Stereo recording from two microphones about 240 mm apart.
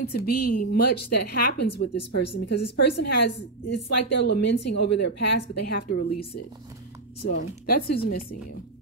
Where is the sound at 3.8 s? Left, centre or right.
Left.